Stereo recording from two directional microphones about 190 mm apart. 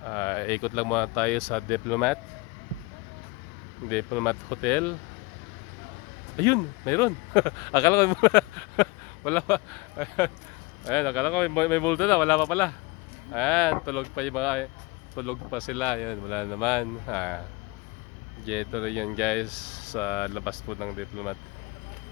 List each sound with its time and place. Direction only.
0.1 s speech: 15° left (ahead or behind)
3.8 s speech: 10° left (ahead or behind)
6.3 s speech: 15° left (ahead or behind)
18.4 s speech: centre (ahead or behind)